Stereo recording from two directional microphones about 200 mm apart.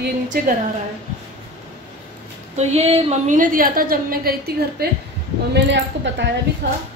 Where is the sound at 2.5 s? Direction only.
30° right (ahead or behind); by 6.3 s 60° right (ahead or behind).